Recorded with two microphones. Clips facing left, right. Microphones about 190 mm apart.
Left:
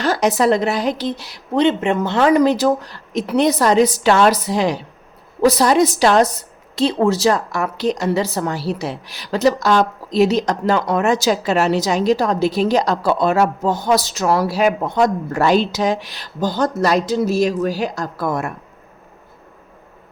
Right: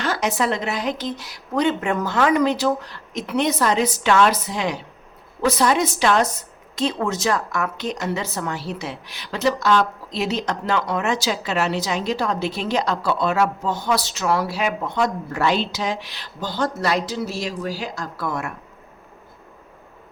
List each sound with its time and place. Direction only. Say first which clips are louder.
0.0 s a woman's voice: left 6 dB; 40° left (ahead or behind)